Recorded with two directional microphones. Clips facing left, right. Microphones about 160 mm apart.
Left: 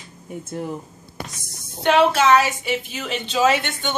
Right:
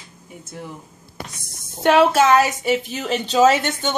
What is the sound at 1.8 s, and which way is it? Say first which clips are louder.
A woman's voice: right 2 dB; 45° right (ahead or behind).